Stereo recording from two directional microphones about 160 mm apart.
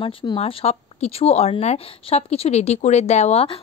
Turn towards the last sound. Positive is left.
turn(degrees=40)  # may be behind; listen again after turning